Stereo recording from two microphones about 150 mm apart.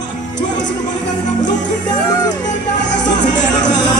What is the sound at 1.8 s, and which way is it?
Speech, 25° left (ahead or behind).